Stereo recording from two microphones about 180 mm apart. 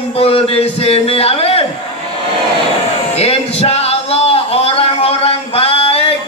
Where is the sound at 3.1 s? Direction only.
35° left (ahead or behind).